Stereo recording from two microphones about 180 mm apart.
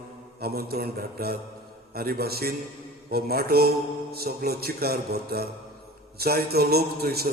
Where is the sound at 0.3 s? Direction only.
60° right (ahead or behind).